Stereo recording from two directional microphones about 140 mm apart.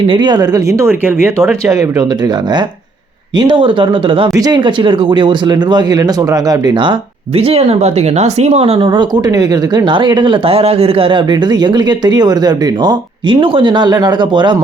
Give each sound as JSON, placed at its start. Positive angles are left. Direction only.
{"t": 0.1, "sound": "speech", "side_deg": -30}
{"t": 4.3, "sound": "speech", "side_deg": -25}